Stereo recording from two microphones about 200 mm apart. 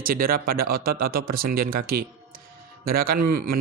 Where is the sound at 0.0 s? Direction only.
45° right (ahead or behind).